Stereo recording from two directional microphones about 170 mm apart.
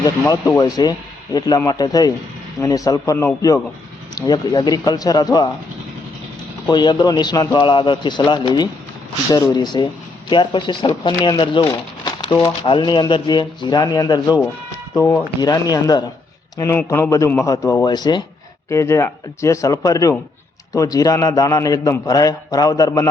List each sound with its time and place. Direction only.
0.0 s speech: 20° left (ahead or behind)
6.7 s speech: 25° left (ahead or behind)